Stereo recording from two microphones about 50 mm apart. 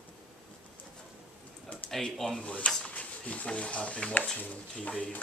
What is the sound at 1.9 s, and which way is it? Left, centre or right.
Speech, centre.